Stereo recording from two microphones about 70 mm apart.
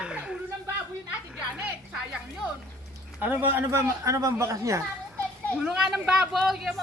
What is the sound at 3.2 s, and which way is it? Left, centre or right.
Speech, right.